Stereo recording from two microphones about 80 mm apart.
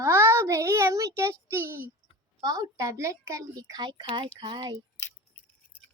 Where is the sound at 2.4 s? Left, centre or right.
Right.